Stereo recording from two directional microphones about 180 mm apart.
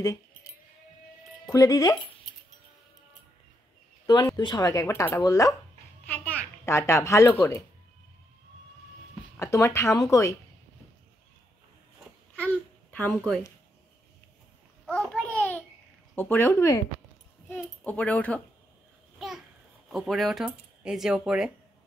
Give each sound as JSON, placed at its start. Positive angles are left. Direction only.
{"t": 0.0, "sound": "sheep", "side_deg": 20}
{"t": 1.5, "sound": "speech", "side_deg": 20}
{"t": 4.0, "sound": "a child's voice", "side_deg": 20}
{"t": 9.4, "sound": "speech", "side_deg": 15}
{"t": 14.9, "sound": "a sound", "side_deg": 5}
{"t": 16.2, "sound": "speech", "side_deg": 15}
{"t": 19.1, "sound": "babbling", "side_deg": 0}
{"t": 19.9, "sound": "speech", "side_deg": 0}